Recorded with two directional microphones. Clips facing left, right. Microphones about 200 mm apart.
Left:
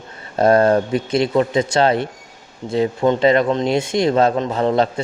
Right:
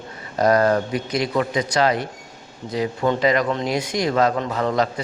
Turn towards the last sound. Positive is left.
turn(degrees=25)  # may be behind; listen again after turning